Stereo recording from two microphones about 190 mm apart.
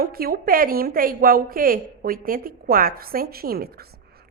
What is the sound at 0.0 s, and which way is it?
A woman's voice, 50° right (ahead or behind).